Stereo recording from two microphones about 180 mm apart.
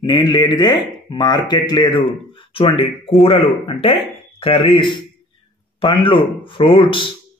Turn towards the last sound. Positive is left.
turn(degrees=30)  # may be behind; listen again after turning